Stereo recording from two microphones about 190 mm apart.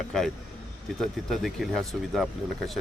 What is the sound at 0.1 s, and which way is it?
Speech, 5° left (ahead or behind).